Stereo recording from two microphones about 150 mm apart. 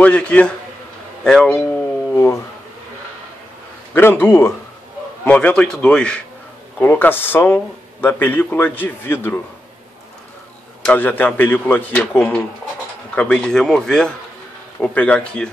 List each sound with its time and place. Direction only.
0.0 s a man's voice: 10° left (ahead or behind)
2.1 s speech: 20° left (ahead or behind)
3.9 s a man's voice: 15° left (ahead or behind)
10.9 s a man's voice: 10° left (ahead or behind)